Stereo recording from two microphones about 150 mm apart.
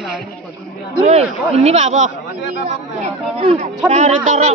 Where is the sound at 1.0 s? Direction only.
45° right (ahead or behind).